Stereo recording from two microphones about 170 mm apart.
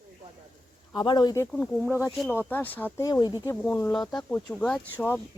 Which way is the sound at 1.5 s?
10° left (ahead or behind).